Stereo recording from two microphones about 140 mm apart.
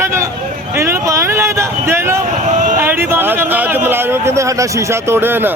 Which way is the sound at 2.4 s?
60° right (ahead or behind).